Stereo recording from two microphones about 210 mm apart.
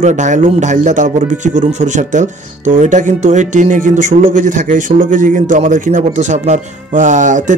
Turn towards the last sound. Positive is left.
turn(degrees=-35)  # may be behind; listen again after turning